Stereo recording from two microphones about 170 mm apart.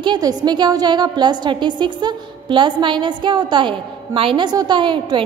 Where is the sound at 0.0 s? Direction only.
25° right (ahead or behind).